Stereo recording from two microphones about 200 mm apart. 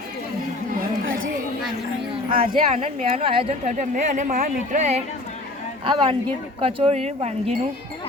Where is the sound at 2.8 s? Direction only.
30° right (ahead or behind).